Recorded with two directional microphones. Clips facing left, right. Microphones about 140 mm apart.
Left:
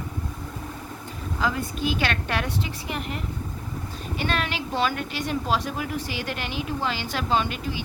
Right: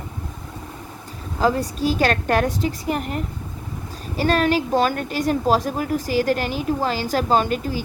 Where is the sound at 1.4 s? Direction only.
35° right (ahead or behind).